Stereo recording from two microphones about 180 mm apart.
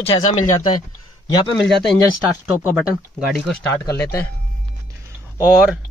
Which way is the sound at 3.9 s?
15° left (ahead or behind).